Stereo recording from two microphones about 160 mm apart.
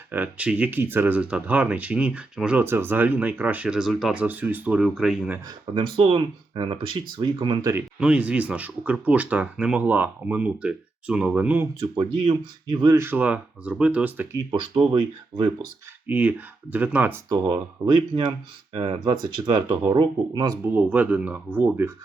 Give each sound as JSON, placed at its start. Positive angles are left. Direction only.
{"t": 0.1, "sound": "speech", "side_deg": -10}
{"t": 5.5, "sound": "speech", "side_deg": -30}
{"t": 7.9, "sound": "speech", "side_deg": -5}
{"t": 11.8, "sound": "speech", "side_deg": -35}
{"t": 12.8, "sound": "speech", "side_deg": -15}
{"t": 14.5, "sound": "speech", "side_deg": -35}
{"t": 16.0, "sound": "speech", "side_deg": -10}
{"t": 18.1, "sound": "speech", "side_deg": -30}
{"t": 20.7, "sound": "speech", "side_deg": -10}